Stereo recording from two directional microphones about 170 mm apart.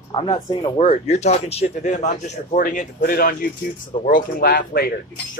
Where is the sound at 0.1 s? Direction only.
30° left (ahead or behind).